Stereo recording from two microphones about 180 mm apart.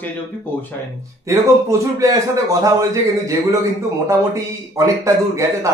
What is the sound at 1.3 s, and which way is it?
Speech, 15° right (ahead or behind).